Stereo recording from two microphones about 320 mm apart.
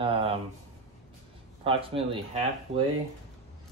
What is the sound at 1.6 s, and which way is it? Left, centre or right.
Speech, centre.